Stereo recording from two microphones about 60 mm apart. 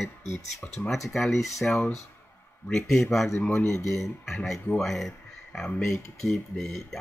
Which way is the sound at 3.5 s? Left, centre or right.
Left.